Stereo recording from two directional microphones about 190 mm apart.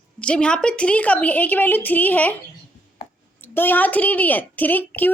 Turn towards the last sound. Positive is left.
turn(degrees=10)  # may be behind; listen again after turning